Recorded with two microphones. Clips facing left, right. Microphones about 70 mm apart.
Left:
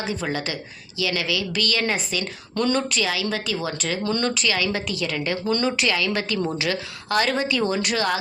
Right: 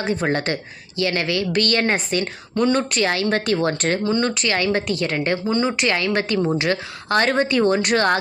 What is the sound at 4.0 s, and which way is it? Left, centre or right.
Speech, right.